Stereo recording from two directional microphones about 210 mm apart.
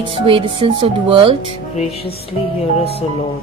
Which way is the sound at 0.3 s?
25° right (ahead or behind).